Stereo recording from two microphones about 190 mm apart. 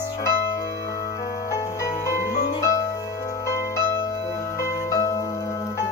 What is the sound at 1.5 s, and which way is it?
Music, 15° left (ahead or behind).